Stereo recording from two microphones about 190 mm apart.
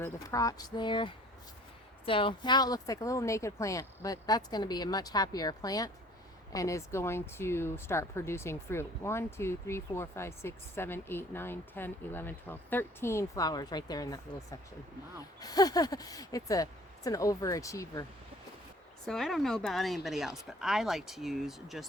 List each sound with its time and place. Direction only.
0.0 s speech: 15° left (ahead or behind)
19.0 s speech: centre (ahead or behind)